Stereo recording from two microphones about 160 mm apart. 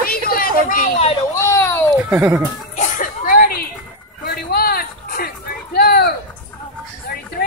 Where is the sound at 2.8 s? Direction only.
60° left (ahead or behind).